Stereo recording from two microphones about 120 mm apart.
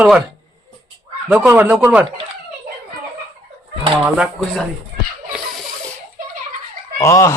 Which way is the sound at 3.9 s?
5° right (ahead or behind).